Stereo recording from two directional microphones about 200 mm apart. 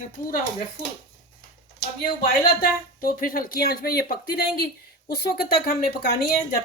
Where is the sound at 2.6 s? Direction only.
50° left (ahead or behind).